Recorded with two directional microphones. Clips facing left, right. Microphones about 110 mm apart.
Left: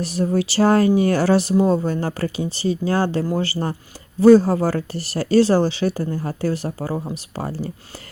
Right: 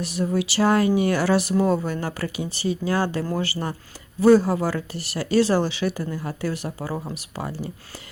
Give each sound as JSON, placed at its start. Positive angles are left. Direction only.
{"t": 0.0, "sound": "speech", "side_deg": 35}